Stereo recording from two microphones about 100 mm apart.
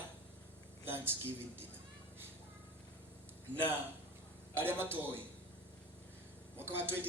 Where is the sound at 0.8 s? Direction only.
20° right (ahead or behind).